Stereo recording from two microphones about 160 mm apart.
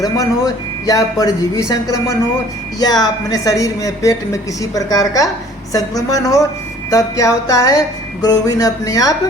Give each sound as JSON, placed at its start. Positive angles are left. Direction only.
{"t": 0.0, "sound": "a woman's voice", "side_deg": 25}